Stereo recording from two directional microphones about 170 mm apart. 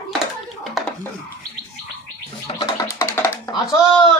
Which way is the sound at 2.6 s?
20° left (ahead or behind).